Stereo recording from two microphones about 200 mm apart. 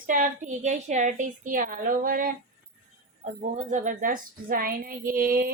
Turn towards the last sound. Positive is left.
turn(degrees=-50)  # may be behind; listen again after turning